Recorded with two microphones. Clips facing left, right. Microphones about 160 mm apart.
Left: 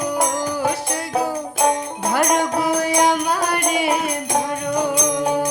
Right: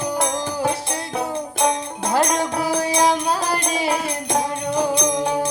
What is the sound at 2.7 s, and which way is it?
Music, 30° right (ahead or behind).